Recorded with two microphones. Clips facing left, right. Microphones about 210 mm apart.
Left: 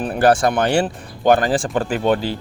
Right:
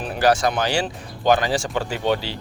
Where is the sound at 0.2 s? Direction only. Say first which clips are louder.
Left 3 dB; 55° left (ahead or behind).